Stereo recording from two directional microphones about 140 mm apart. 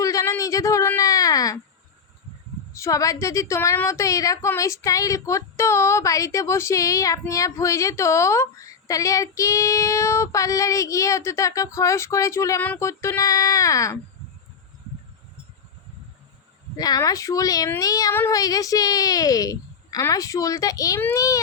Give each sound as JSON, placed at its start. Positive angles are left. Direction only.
{"t": 0.0, "sound": "a sound", "side_deg": 25}
{"t": 2.7, "sound": "a woman's voice", "side_deg": 25}
{"t": 16.7, "sound": "a woman's voice", "side_deg": 25}